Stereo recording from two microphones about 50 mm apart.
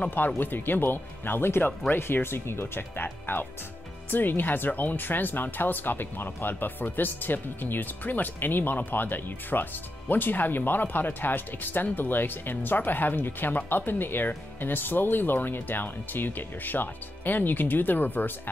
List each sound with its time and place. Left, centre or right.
0.4 s speech: left